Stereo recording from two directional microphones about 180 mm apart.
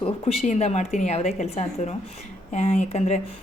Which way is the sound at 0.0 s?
35° left (ahead or behind).